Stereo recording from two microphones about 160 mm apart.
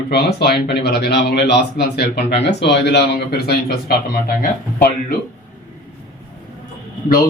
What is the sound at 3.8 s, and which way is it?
Speech, 70° left (ahead or behind).